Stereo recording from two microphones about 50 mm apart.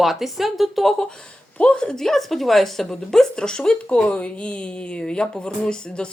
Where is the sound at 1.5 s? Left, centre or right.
Left.